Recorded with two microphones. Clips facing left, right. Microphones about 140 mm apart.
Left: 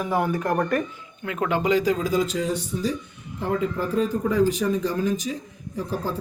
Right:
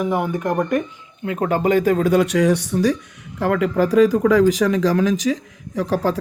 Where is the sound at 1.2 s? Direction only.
35° right (ahead or behind).